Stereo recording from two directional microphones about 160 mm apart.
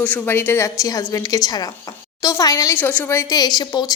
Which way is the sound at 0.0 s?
10° left (ahead or behind).